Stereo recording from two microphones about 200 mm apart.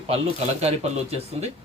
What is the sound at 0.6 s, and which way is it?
Speech, 30° right (ahead or behind).